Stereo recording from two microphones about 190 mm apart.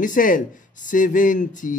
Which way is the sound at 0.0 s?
45° left (ahead or behind).